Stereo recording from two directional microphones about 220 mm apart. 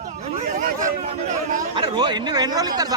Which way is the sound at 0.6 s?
35° right (ahead or behind).